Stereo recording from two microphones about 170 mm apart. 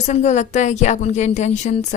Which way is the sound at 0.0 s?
45° left (ahead or behind).